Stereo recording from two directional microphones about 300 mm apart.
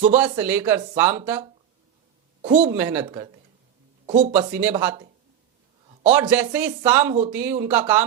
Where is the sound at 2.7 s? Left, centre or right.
Centre.